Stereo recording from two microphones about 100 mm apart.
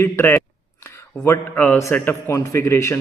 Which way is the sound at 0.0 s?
25° left (ahead or behind).